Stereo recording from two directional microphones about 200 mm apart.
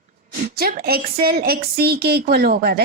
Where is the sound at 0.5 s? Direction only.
50° right (ahead or behind).